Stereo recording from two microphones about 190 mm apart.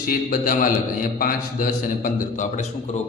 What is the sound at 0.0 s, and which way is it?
A man's voice, 50° left (ahead or behind).